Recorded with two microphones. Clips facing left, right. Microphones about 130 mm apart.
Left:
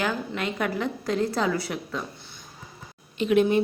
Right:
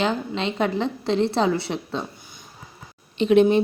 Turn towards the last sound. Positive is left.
turn(degrees=-25)  # may be behind; listen again after turning